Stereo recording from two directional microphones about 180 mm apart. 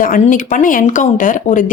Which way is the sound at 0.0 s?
50° left (ahead or behind).